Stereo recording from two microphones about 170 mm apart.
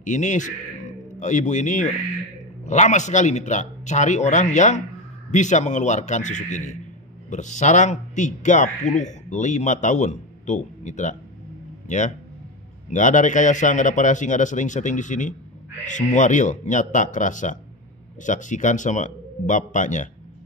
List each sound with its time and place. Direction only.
0.0 s a man's voice: 45° left (ahead or behind)
12.9 s a man's voice: 45° left (ahead or behind)